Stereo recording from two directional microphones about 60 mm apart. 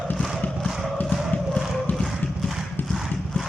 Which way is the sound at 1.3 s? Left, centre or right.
Left.